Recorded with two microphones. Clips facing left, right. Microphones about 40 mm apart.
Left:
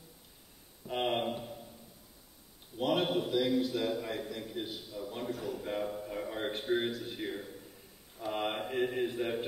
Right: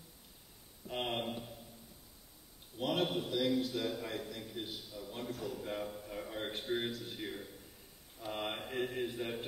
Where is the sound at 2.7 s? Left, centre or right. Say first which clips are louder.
Left 4 dB; centre.